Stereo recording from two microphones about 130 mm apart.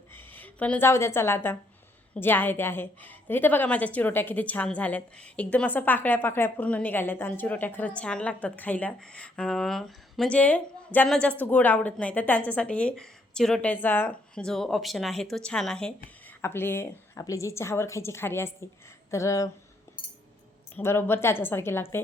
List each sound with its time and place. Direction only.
0.1 s a woman's voice: 15° left (ahead or behind)
14.4 s speech: 5° left (ahead or behind)
16.2 s speech: 15° left (ahead or behind)
20.7 s a woman's voice: 20° left (ahead or behind)